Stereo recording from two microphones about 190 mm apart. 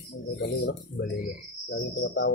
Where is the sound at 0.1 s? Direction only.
65° left (ahead or behind).